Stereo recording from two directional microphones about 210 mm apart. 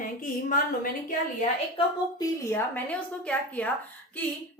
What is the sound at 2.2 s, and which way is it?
A woman's voice, 10° left (ahead or behind).